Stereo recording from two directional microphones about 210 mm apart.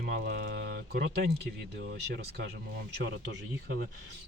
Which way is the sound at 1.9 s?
50° right (ahead or behind).